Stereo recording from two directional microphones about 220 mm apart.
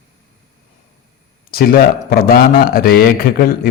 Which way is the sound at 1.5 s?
40° left (ahead or behind).